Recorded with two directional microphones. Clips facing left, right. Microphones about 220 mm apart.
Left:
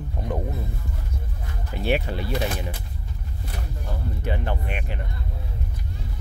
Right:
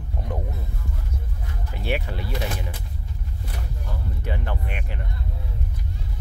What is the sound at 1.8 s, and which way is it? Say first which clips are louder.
Speech: left 4 dB; 25° left (ahead or behind).